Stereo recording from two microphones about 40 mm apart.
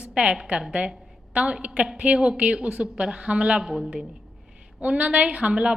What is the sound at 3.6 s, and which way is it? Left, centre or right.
Speech, centre.